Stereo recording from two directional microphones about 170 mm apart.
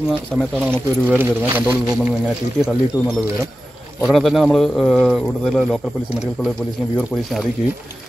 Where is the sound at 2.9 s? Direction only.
15° left (ahead or behind).